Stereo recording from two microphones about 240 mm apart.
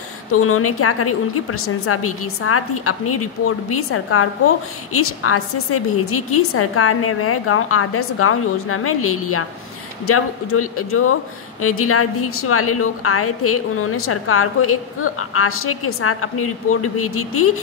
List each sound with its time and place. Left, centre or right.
0.3 s a woman's voice: left